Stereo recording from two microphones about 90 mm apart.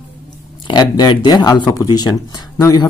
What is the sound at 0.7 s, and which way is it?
Speech, 55° left (ahead or behind).